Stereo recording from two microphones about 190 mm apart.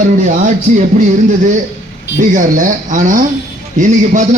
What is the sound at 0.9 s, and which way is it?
Speech, 40° right (ahead or behind).